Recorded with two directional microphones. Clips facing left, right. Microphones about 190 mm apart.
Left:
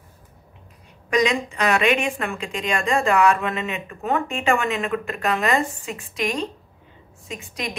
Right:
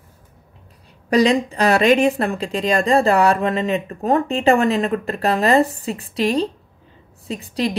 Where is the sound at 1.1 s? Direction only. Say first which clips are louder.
Right 5 dB; 35° right (ahead or behind).